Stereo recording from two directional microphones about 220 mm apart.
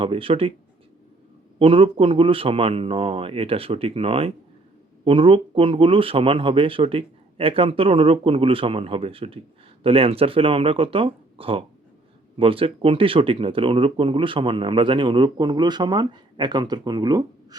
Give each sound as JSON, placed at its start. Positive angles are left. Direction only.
{"t": 0.0, "sound": "speech", "side_deg": -25}
{"t": 1.5, "sound": "speech", "side_deg": -25}